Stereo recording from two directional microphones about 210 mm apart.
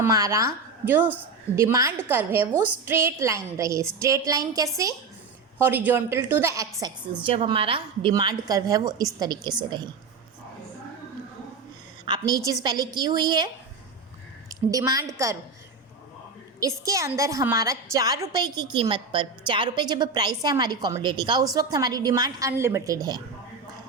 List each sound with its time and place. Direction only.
0.0 s a woman's voice: 15° right (ahead or behind)
12.0 s a woman's voice: 20° right (ahead or behind)
14.7 s a woman's voice: 15° right (ahead or behind)
16.6 s a woman's voice: 15° right (ahead or behind)